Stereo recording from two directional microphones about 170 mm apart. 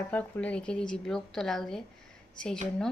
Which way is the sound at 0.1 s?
10° left (ahead or behind).